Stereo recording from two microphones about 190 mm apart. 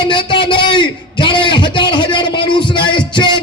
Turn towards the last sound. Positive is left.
turn(degrees=25)  # may be behind; listen again after turning